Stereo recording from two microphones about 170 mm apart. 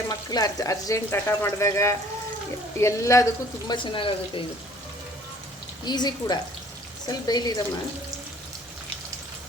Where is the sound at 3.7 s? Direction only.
30° left (ahead or behind).